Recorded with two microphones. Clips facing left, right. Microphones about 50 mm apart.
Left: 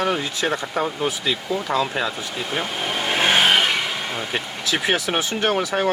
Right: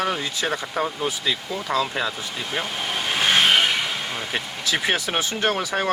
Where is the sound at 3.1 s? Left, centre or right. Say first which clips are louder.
Left 2 dB; centre.